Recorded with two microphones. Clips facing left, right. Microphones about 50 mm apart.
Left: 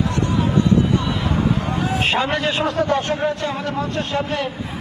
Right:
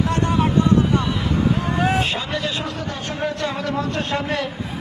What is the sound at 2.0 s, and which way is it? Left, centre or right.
A man's voice, left.